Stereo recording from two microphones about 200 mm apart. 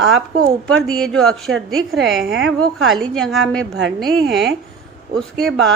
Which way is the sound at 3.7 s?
65° right (ahead or behind).